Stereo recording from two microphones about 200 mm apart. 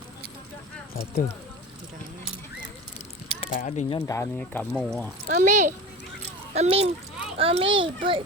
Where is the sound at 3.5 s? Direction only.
40° left (ahead or behind).